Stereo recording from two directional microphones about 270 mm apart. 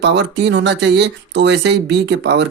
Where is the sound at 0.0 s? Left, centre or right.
Right.